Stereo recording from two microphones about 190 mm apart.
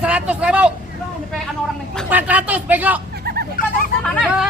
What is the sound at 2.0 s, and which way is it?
Speech, 10° right (ahead or behind).